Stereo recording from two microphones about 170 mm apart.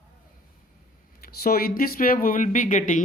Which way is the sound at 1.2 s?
60° left (ahead or behind).